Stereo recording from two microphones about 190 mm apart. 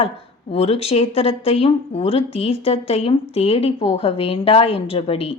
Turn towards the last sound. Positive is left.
turn(degrees=30)  # may be behind; listen again after turning